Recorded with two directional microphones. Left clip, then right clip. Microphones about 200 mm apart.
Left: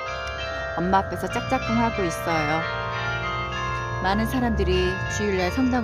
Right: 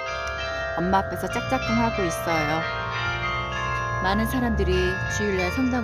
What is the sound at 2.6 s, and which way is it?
Music, 60° right (ahead or behind).